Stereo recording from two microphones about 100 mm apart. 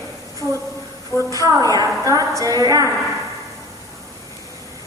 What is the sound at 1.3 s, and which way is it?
A woman's voice, 35° right (ahead or behind).